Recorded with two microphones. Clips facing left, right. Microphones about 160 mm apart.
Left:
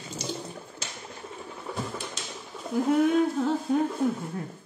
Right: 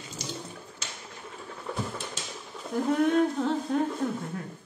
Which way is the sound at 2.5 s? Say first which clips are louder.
Left 3 dB; centre (ahead or behind).